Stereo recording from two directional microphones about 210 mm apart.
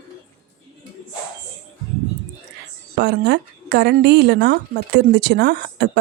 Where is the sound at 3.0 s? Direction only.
50° right (ahead or behind).